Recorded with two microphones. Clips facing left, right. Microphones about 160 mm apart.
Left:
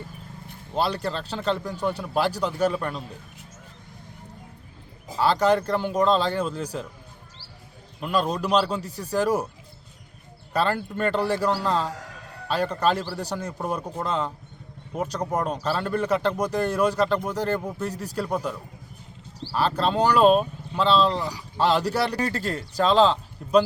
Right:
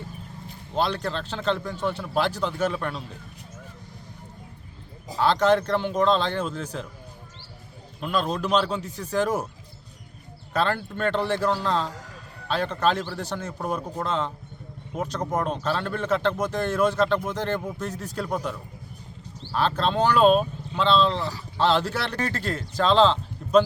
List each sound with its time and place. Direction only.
0.7 s speech: 5° left (ahead or behind)
5.1 s speech: 5° left (ahead or behind)
8.0 s speech: 5° left (ahead or behind)
10.5 s speech: 10° left (ahead or behind)
22.4 s speech: 40° left (ahead or behind)
22.8 s speech: 10° left (ahead or behind)